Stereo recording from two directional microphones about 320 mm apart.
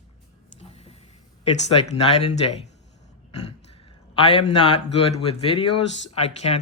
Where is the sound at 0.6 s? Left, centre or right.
Centre.